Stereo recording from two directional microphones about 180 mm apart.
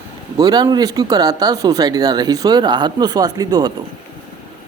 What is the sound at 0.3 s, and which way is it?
Speech, 20° right (ahead or behind).